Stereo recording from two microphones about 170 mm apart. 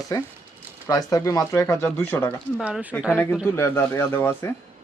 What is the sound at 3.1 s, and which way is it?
Speech, 15° left (ahead or behind).